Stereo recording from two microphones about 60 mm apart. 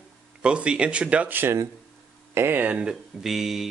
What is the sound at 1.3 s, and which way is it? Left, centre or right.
Speech, right.